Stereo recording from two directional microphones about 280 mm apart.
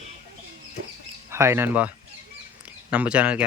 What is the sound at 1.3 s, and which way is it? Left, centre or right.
Speech, centre.